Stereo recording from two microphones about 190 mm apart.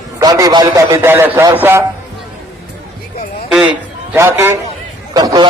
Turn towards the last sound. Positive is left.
turn(degrees=-20)  # may be behind; listen again after turning